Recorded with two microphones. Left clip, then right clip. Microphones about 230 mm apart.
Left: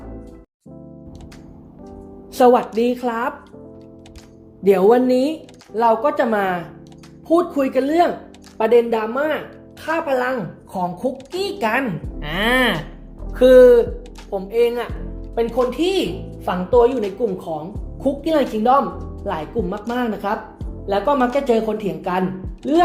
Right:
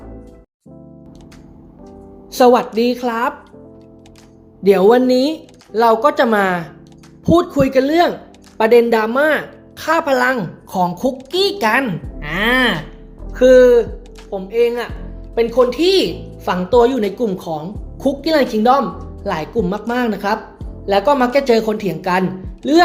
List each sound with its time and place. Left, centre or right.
2.3 s speech: centre
4.6 s a woman's voice: centre
15.4 s speech: centre